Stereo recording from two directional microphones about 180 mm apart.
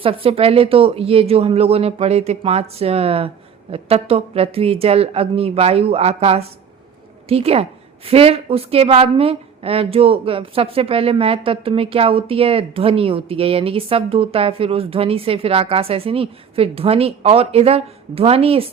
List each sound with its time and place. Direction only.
0.0 s a woman's voice: 30° right (ahead or behind)